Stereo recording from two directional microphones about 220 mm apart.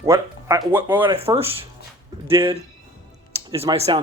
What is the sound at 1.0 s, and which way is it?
A man's voice, 20° right (ahead or behind).